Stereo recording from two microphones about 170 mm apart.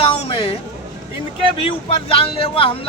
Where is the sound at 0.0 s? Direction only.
35° left (ahead or behind).